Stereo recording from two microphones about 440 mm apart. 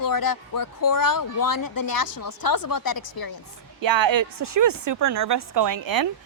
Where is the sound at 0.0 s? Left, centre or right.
Left.